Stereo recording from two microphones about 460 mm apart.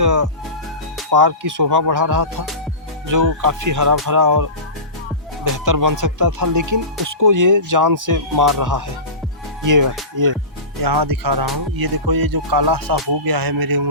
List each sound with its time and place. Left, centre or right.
0.0 s speech: right
5.5 s speech: right